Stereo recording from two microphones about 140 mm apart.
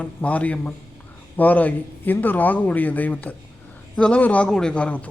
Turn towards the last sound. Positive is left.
turn(degrees=10)  # may be behind; listen again after turning